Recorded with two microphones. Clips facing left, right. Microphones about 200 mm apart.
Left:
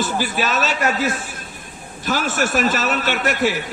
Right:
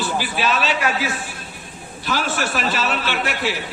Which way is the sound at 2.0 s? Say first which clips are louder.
Left 2 dB; 45° left (ahead or behind).